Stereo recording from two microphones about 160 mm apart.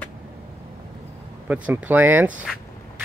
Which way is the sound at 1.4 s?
10° right (ahead or behind).